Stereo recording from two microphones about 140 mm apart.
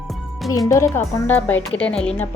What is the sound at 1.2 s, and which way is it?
Speech, 10° left (ahead or behind).